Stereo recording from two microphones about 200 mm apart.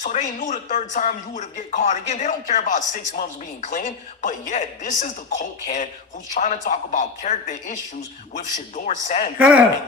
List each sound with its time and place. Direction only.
0.0 s speech: 35° left (ahead or behind)
9.4 s speech: 5° right (ahead or behind)